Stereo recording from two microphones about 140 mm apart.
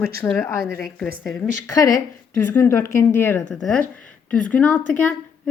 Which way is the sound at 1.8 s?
25° left (ahead or behind).